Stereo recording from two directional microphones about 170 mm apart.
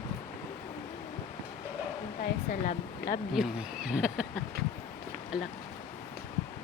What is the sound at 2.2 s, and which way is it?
Speech, 55° left (ahead or behind).